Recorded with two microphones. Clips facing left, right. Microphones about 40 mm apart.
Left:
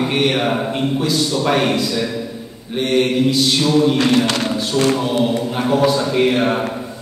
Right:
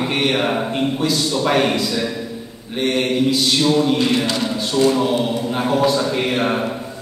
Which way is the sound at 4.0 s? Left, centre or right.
Left.